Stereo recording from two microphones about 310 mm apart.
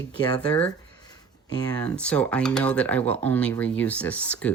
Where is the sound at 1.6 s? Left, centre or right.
Centre.